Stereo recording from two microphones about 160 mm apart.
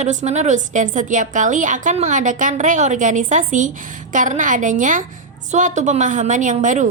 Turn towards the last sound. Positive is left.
turn(degrees=-50)  # may be behind; listen again after turning